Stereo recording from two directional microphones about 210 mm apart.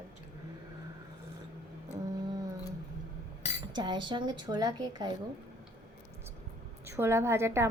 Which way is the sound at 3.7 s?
20° right (ahead or behind).